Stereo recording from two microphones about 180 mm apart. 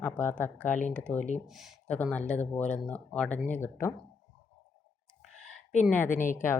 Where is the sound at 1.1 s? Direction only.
40° left (ahead or behind).